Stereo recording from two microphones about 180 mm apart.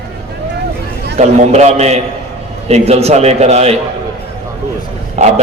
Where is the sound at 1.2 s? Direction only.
40° right (ahead or behind).